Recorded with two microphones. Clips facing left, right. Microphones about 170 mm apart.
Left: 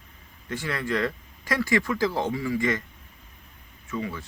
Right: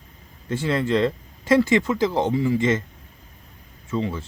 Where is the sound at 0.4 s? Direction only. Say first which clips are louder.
Right 7 dB; 25° right (ahead or behind).